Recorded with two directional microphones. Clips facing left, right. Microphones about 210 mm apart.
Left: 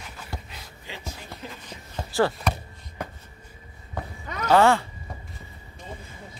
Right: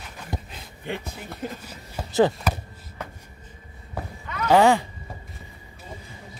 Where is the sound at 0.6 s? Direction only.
60° right (ahead or behind).